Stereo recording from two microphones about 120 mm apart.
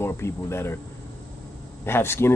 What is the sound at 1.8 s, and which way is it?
Speech, 20° left (ahead or behind).